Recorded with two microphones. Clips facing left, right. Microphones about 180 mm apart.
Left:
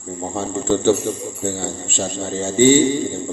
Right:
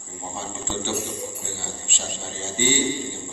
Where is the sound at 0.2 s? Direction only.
50° left (ahead or behind).